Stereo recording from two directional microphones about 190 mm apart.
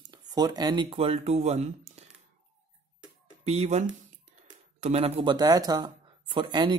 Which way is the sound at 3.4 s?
35° right (ahead or behind).